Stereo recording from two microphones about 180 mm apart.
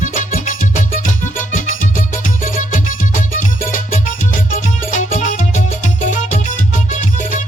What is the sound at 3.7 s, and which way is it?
Music, 45° left (ahead or behind).